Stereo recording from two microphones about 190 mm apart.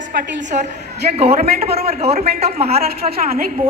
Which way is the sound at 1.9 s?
35° right (ahead or behind).